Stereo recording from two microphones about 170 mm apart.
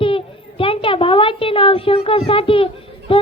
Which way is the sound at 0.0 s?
30° left (ahead or behind).